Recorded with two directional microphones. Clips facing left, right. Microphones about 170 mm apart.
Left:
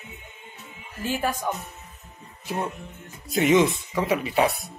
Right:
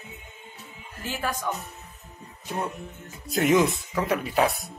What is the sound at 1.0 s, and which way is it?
Speech, 15° left (ahead or behind).